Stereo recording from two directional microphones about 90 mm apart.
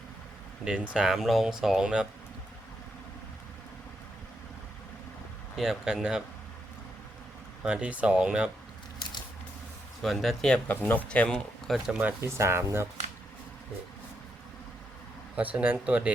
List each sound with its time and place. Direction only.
0.6 s speech: 10° right (ahead or behind)
5.5 s speech: 5° right (ahead or behind)
7.6 s speech: 10° right (ahead or behind)
9.0 s biting: 55° left (ahead or behind)
10.0 s speech: centre (ahead or behind)
10.8 s speech: 15° left (ahead or behind)
11.9 s speech: 20° right (ahead or behind)
12.3 s speech: 30° right (ahead or behind)
15.4 s speech: 15° right (ahead or behind)